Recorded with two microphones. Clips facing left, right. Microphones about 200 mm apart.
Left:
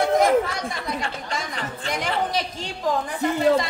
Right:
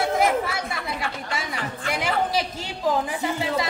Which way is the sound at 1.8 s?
5° right (ahead or behind).